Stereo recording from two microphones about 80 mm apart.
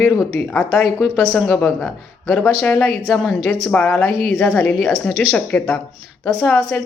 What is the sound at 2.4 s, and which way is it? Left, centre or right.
Speech, left.